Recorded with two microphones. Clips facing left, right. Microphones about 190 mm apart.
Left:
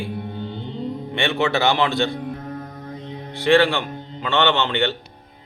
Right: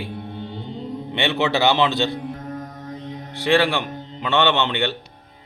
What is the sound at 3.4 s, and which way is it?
Speech, 15° right (ahead or behind).